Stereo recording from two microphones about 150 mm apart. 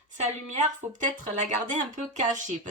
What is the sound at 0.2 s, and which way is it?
Speech, 50° right (ahead or behind).